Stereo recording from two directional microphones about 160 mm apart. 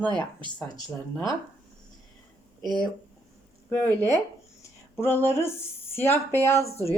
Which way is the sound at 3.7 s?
15° left (ahead or behind).